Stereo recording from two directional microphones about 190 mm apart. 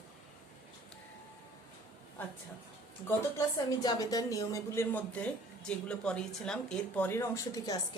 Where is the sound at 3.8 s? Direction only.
20° left (ahead or behind).